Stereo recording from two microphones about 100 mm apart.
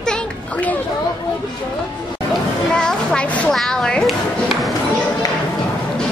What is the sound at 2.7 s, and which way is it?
A child's voice, 10° left (ahead or behind).